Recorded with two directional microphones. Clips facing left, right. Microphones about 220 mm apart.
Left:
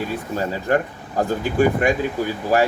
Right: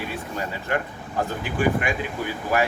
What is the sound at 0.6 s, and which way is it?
Speech, 40° left (ahead or behind).